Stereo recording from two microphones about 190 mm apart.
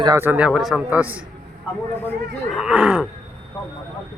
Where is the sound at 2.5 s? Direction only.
5° right (ahead or behind).